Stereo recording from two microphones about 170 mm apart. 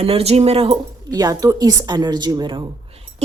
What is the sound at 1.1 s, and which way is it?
A woman's voice, 20° right (ahead or behind).